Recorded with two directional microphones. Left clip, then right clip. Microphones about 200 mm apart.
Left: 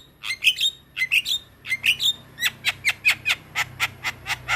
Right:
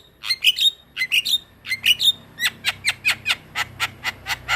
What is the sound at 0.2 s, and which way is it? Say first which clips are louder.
Bird: right 3 dB; centre (ahead or behind).